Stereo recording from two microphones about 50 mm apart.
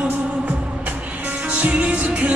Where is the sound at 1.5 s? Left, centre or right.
Right.